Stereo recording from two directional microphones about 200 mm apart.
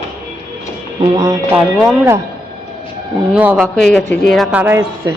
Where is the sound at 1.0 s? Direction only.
20° right (ahead or behind).